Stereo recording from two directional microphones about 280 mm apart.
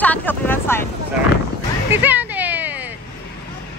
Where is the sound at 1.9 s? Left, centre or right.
Centre.